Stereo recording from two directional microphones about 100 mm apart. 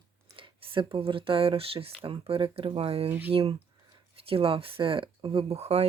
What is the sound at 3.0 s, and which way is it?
Speech, 20° right (ahead or behind).